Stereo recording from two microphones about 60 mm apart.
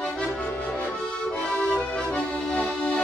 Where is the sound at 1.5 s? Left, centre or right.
Centre.